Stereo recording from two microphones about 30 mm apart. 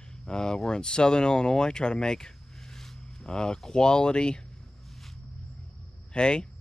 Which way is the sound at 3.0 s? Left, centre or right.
Left.